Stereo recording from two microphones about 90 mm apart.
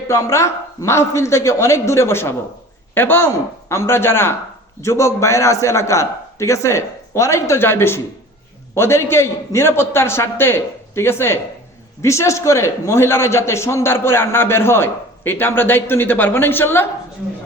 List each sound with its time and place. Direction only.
0.1 s a man's voice: 30° left (ahead or behind)